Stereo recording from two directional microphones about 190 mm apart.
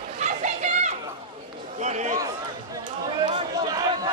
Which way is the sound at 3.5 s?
20° right (ahead or behind).